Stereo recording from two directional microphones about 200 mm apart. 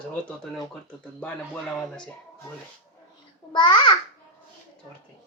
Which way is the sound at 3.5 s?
25° left (ahead or behind).